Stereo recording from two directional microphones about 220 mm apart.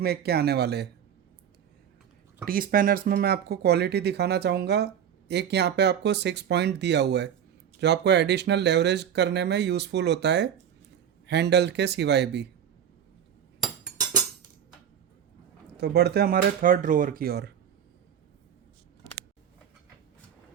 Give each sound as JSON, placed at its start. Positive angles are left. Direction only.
{"t": 0.0, "sound": "speech", "side_deg": -45}
{"t": 2.4, "sound": "speech", "side_deg": -40}
{"t": 15.8, "sound": "speech", "side_deg": -50}